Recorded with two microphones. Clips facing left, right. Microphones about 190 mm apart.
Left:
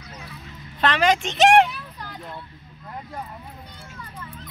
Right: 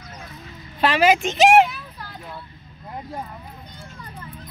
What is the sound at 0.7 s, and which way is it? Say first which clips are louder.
Vehicle: right 3 dB; 10° right (ahead or behind).